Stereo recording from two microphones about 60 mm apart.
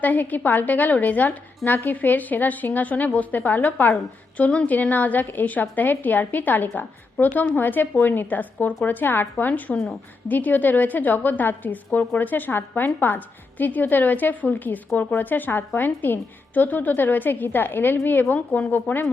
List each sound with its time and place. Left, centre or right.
0.0 s a woman's voice: left